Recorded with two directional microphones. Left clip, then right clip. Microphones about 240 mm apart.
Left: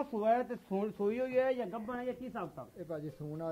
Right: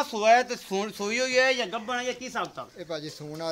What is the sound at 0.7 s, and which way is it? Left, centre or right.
Speech, centre.